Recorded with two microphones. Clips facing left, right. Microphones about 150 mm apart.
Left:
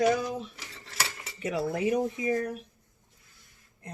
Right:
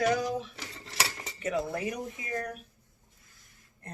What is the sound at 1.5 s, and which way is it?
Speech, 25° left (ahead or behind).